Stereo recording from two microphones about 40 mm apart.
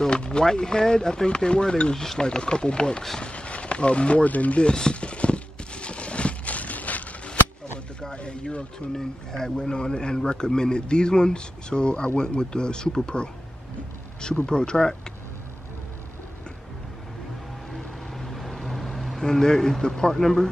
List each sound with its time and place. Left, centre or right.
0.0 s speech: left
3.2 s speech: left
4.6 s speech: left
5.1 s clip-clop: left
8.0 s a sound: left
8.9 s speech: centre
14.4 s speech: left
17.6 s vehicle: centre
19.1 s speech: centre
20.2 s speech: centre